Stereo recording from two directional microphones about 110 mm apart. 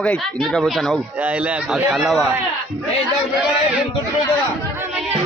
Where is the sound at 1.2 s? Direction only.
15° right (ahead or behind).